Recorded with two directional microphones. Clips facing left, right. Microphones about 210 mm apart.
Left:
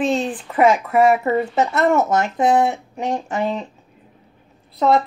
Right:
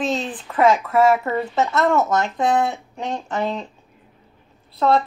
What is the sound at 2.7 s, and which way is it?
Speech, 10° left (ahead or behind).